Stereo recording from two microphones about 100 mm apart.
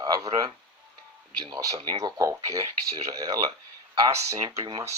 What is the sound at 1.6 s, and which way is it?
Speech, 35° right (ahead or behind).